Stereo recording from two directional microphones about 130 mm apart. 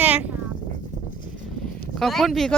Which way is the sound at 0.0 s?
10° right (ahead or behind).